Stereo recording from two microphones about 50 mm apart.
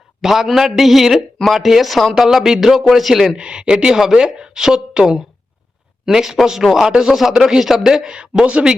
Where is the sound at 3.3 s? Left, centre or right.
Centre.